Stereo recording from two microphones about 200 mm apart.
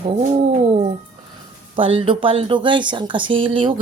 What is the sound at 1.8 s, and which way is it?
Speech, 25° right (ahead or behind).